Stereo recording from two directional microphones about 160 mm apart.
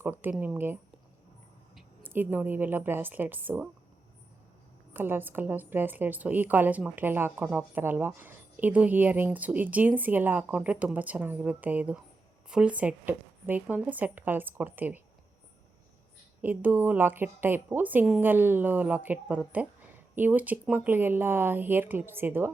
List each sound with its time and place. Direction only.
0.0 s a woman's voice: 10° right (ahead or behind)
2.0 s a woman's voice: 10° right (ahead or behind)
4.9 s a woman's voice: 15° right (ahead or behind)
16.4 s a woman's voice: 10° right (ahead or behind)